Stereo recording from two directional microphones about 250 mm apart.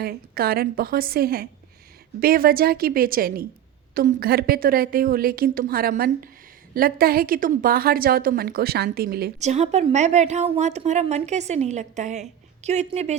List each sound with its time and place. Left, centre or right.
0.0 s a woman's voice: right